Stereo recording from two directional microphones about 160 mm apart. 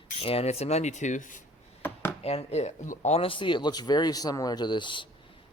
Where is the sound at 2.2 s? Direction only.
40° left (ahead or behind).